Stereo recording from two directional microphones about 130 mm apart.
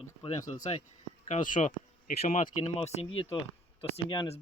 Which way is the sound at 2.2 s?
60° left (ahead or behind).